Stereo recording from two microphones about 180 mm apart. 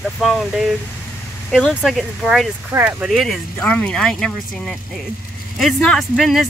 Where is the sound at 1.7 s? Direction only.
Centre (ahead or behind).